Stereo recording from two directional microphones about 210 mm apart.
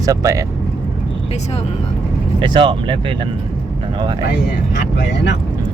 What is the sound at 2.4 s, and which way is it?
Speech, 25° right (ahead or behind).